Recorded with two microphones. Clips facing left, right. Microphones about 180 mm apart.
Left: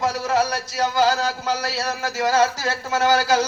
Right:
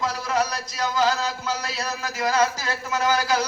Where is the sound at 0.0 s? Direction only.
40° left (ahead or behind).